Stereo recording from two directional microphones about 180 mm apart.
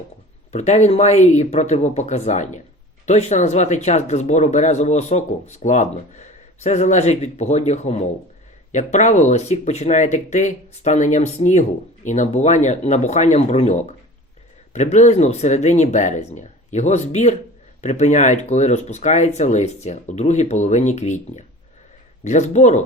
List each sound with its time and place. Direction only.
0.5 s speech: 40° left (ahead or behind)